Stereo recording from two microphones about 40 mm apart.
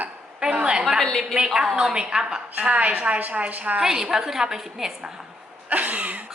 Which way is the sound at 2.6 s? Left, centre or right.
Right.